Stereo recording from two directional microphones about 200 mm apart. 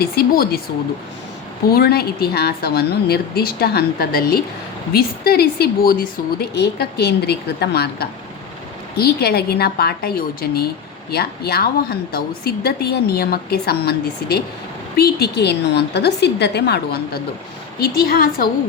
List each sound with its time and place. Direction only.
0.0 s a woman's voice: 50° left (ahead or behind)
1.7 s a woman's voice: 50° left (ahead or behind)